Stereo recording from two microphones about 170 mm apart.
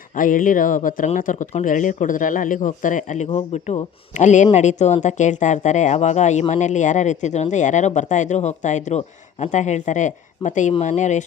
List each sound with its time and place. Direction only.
0.1 s speech: 55° left (ahead or behind)